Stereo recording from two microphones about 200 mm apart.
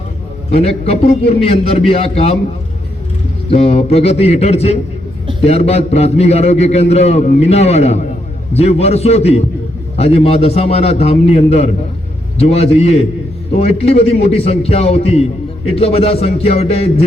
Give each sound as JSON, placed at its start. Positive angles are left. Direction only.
{"t": 0.5, "sound": "a man's voice", "side_deg": 30}
{"t": 3.5, "sound": "a man's voice", "side_deg": 30}